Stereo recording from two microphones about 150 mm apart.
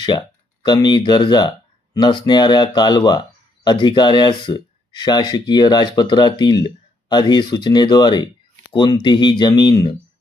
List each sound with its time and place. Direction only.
0.0 s speech: 30° left (ahead or behind)